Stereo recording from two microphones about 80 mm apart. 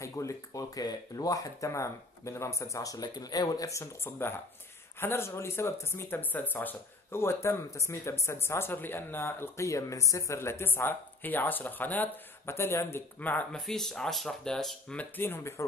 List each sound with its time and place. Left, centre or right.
0.0 s speech: left
12.5 s speech: left
13.5 s speech: centre
15.0 s speech: left